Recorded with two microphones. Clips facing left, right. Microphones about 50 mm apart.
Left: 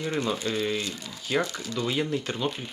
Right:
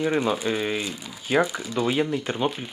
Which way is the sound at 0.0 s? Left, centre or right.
Centre.